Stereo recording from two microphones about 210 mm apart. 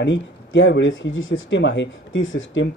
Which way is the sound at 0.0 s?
60° left (ahead or behind).